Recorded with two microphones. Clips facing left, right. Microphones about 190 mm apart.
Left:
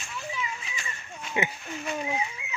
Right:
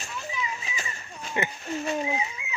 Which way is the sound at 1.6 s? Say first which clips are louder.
Right 4 dB; 35° right (ahead or behind).